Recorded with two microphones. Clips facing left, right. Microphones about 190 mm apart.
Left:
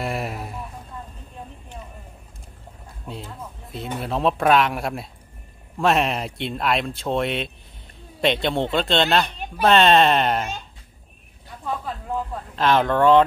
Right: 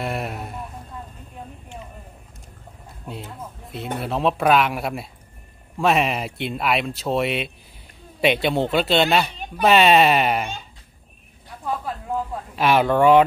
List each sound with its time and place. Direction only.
0.0 s a sound: centre (ahead or behind)
3.1 s speech: centre (ahead or behind)
12.5 s speech: 10° right (ahead or behind)